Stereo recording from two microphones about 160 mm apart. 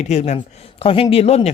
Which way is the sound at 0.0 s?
45° left (ahead or behind).